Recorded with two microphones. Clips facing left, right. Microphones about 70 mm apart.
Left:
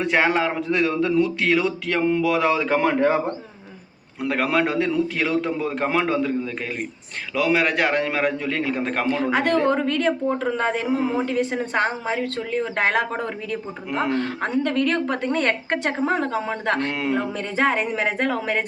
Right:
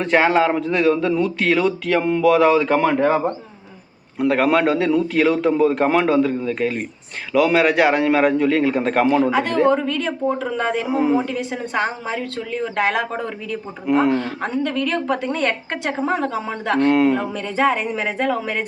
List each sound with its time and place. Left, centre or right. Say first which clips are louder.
0.0 s a man's voice: right 4 dB; centre
4.2 s a man's voice: right 5 dB; centre
9.3 s speech: right 3 dB; left
10.8 s a woman's voice: right 4 dB; centre
11.3 s speech: left 2 dB; left
13.8 s a man's voice: right 8 dB; centre
14.2 s speech: even; left
16.8 s a man's voice: right 9 dB; centre
17.3 s speech: right 2 dB; left